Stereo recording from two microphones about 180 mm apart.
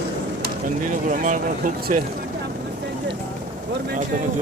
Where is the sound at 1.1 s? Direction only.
45° right (ahead or behind).